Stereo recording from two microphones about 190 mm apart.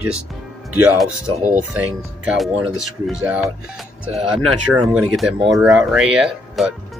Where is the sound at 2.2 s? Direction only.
Centre (ahead or behind).